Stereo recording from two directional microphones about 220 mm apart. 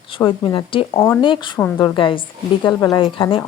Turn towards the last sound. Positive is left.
turn(degrees=25)  # may be behind; listen again after turning